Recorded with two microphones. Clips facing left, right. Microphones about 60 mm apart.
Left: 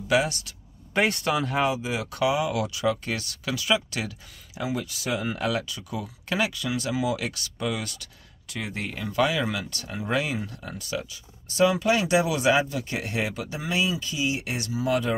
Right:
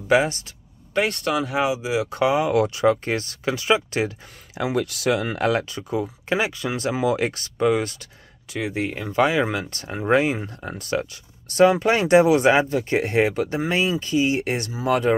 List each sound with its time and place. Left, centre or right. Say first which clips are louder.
0.1 s speech: right 5 dB; right
0.9 s speech: right 2 dB; centre
2.0 s speech: right 3 dB; right
4.6 s speech: right 6 dB; right
8.5 s speech: right 7 dB; centre; by 10.9 s right
10.9 s speech: right 7 dB; right